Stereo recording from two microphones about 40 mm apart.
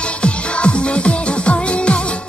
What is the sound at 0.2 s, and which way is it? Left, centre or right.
Music, left.